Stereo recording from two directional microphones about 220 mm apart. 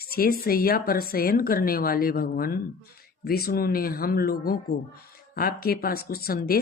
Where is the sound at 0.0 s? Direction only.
45° left (ahead or behind).